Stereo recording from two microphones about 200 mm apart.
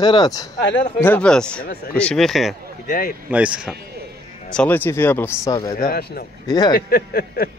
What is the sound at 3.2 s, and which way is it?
Speech, 5° right (ahead or behind).